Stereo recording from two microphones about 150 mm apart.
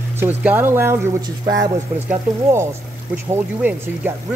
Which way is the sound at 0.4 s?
10° right (ahead or behind).